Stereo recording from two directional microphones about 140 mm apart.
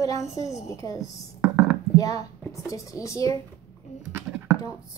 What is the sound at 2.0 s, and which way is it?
Speech, 25° left (ahead or behind).